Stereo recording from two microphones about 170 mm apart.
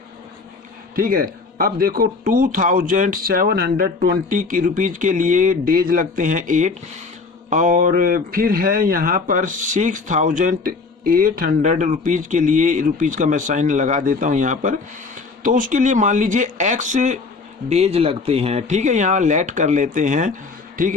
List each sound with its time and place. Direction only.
0.9 s speech: 55° right (ahead or behind)